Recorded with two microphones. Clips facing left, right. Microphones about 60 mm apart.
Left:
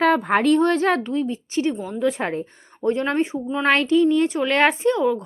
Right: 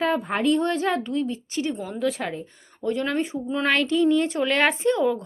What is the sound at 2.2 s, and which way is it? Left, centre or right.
A woman's voice, left.